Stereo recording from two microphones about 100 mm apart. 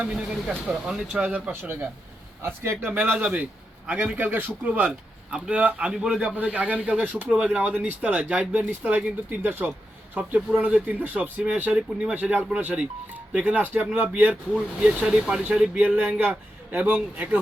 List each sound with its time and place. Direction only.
0.0 s a man's voice: 5° right (ahead or behind)